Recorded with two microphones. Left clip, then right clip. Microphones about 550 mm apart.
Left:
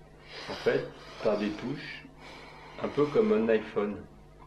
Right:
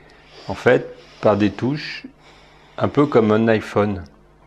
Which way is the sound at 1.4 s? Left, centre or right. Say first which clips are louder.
Right 13 dB; right.